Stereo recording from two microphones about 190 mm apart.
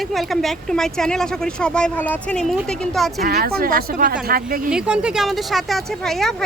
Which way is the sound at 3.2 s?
55° right (ahead or behind).